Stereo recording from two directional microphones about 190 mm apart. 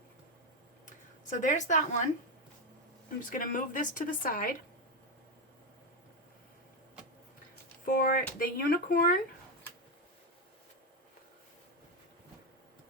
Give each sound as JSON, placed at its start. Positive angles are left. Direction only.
{"t": 0.9, "sound": "a sound", "side_deg": 40}
{"t": 3.2, "sound": "speech", "side_deg": 45}
{"t": 7.9, "sound": "speech", "side_deg": 45}